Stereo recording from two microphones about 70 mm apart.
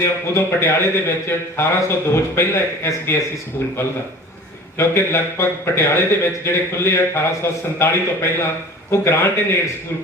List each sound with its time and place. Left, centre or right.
0.0 s a man's voice: left
4.8 s a man's voice: left